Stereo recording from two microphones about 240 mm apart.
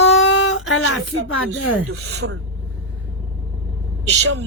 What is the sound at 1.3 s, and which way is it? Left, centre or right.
Speech, left.